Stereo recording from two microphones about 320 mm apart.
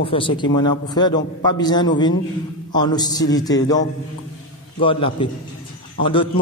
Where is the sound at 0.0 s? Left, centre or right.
Centre.